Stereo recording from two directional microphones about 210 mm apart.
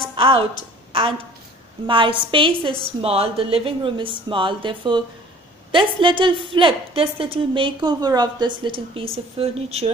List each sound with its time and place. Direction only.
0.1 s a woman's voice: 25° right (ahead or behind)
1.9 s a woman's voice: 25° right (ahead or behind)